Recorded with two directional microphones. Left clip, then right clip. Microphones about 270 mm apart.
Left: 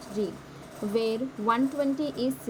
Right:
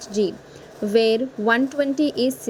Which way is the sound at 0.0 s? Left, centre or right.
Right.